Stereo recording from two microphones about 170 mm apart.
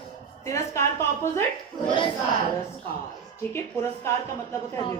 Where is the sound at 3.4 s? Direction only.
10° left (ahead or behind).